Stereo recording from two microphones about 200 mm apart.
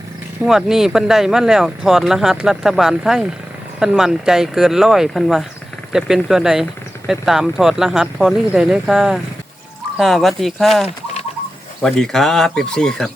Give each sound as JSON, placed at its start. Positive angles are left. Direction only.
{"t": 0.4, "sound": "speech", "side_deg": 0}
{"t": 10.8, "sound": "a sound", "side_deg": 35}
{"t": 11.8, "sound": "speech", "side_deg": 0}